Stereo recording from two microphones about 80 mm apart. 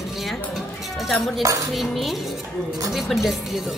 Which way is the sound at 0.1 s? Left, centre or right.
Centre.